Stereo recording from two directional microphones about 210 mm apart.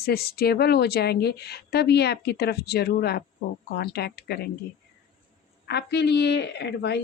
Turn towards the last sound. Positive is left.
turn(degrees=50)  # may be behind; listen again after turning